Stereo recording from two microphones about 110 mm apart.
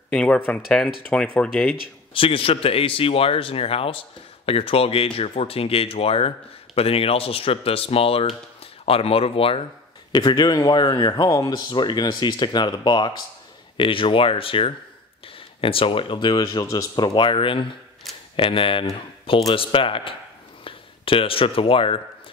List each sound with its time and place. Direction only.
0.1 s speech: 10° left (ahead or behind)
2.1 s speech: 55° left (ahead or behind)
10.1 s speech: 40° left (ahead or behind)
16.4 s speech: 30° left (ahead or behind); by 22.0 s 55° left (ahead or behind)